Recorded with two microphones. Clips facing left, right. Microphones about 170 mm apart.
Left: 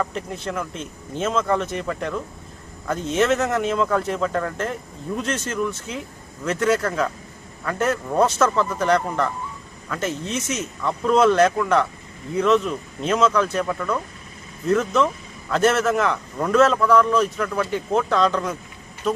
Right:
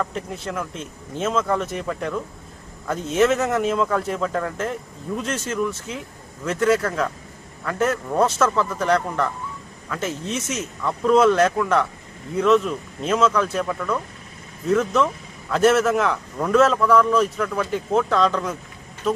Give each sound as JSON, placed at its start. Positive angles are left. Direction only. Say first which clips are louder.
{"t": 0.0, "sound": "speech", "louder": "left 1 dB", "side_deg": 0}